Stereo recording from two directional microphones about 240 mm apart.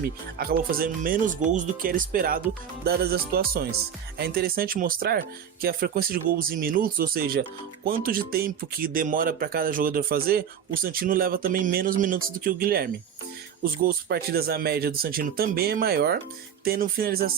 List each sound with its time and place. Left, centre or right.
0.3 s speech: right